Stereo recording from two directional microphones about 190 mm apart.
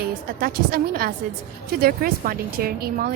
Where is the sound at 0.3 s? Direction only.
50° right (ahead or behind).